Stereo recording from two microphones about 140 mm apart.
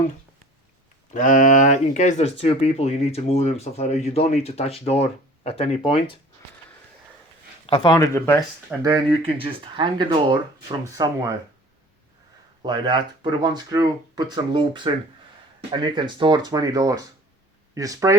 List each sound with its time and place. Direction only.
1.1 s speech: 65° left (ahead or behind)
2.3 s speech: 45° left (ahead or behind)
7.7 s speech: 35° left (ahead or behind)
7.9 s speech: 25° left (ahead or behind)
8.8 s speech: 25° right (ahead or behind)
9.2 s speech: 40° right (ahead or behind)
12.6 s speech: 35° right (ahead or behind)